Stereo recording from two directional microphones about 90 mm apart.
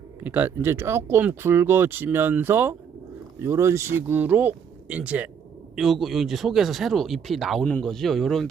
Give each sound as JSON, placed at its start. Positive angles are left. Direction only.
{"t": 0.3, "sound": "speech", "side_deg": -20}
{"t": 5.7, "sound": "speech", "side_deg": 0}